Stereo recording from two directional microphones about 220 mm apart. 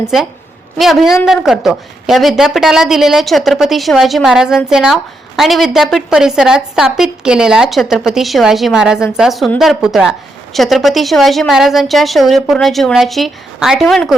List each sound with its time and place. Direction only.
0.8 s a woman's voice: centre (ahead or behind)